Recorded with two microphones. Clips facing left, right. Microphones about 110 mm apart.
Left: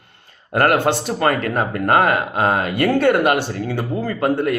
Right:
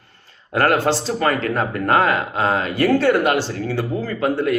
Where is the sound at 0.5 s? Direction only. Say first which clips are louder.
Left 1 dB; 55° left (ahead or behind).